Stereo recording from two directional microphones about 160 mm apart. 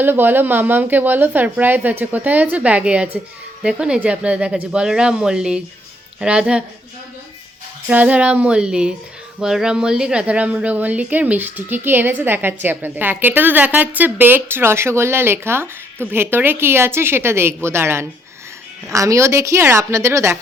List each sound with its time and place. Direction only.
0.0 s speech: 15° right (ahead or behind)
7.9 s speech: 10° right (ahead or behind)